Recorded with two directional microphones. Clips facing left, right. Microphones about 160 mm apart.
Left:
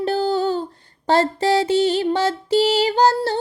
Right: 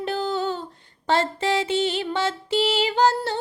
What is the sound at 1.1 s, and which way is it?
Music, 35° left (ahead or behind).